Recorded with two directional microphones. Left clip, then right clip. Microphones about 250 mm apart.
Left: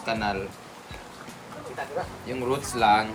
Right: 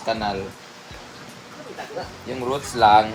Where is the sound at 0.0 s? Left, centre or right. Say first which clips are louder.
Right 3 dB; centre.